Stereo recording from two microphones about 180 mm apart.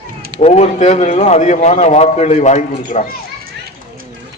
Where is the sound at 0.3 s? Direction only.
40° left (ahead or behind).